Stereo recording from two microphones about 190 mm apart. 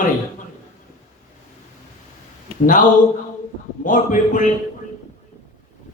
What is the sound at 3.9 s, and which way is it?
Speech, 40° left (ahead or behind).